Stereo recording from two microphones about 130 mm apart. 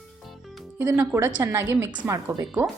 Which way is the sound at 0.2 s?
Centre (ahead or behind).